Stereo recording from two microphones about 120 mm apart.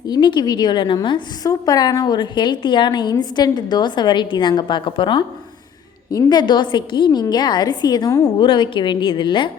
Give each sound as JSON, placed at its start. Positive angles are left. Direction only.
{"t": 0.1, "sound": "a woman's voice", "side_deg": 40}